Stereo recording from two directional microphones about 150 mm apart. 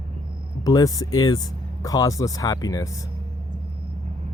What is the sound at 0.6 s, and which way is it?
Speech, 25° left (ahead or behind).